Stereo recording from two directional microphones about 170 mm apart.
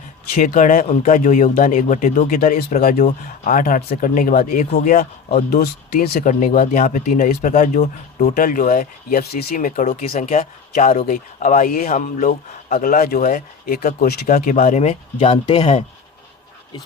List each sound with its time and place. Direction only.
0.3 s speech: 50° left (ahead or behind); by 15.8 s 35° left (ahead or behind)